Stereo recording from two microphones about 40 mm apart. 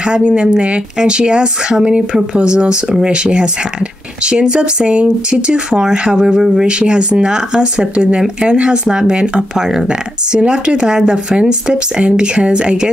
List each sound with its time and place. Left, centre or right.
0.0 s speech: right
9.6 s speech: centre
9.8 s speech: right